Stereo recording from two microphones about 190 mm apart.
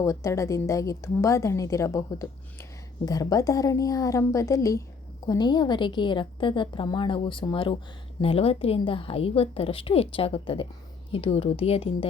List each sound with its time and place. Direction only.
0.0 s a woman's voice: 15° left (ahead or behind)